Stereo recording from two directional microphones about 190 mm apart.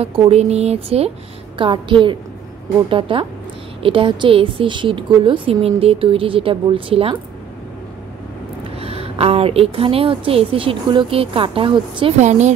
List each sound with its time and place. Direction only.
0.0 s a woman's voice: 30° right (ahead or behind)
8.7 s speech: 30° right (ahead or behind)
12.2 s a woman's voice: 35° right (ahead or behind)